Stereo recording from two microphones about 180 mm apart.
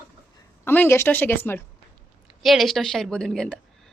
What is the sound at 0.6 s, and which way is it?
A woman's voice, 10° left (ahead or behind).